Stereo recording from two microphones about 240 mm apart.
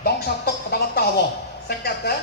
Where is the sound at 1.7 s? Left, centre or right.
Left.